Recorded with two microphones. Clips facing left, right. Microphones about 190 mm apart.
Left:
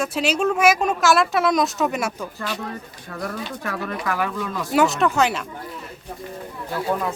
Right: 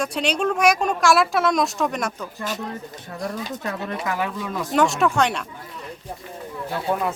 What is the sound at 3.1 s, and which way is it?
Speech, 20° right (ahead or behind).